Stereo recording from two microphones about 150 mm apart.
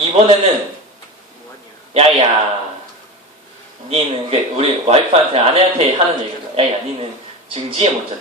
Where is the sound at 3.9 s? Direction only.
40° right (ahead or behind).